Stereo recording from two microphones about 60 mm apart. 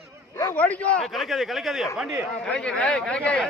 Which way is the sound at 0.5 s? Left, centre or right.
Left.